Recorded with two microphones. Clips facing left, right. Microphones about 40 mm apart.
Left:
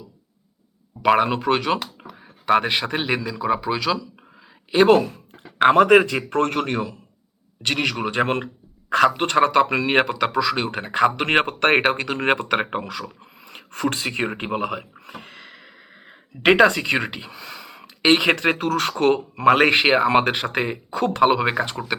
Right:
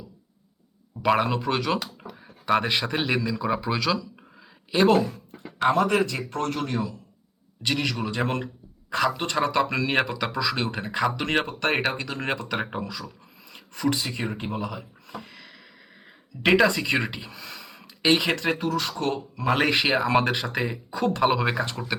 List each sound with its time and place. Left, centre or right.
1.0 s speech: centre
1.5 s a man's voice: left; by 3.8 s centre
3.8 s a sound: centre
5.5 s speech: left
7.7 s speech: left
9.6 s speech: left
11.8 s speech: left
13.7 s speech: left
15.3 s a sound: left
16.7 s speech: left
17.0 s speech: centre
18.0 s speech: left
18.6 s speech: left
21.2 s speech: centre